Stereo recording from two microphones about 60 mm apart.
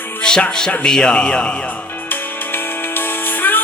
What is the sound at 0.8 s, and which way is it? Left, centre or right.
Speech, centre.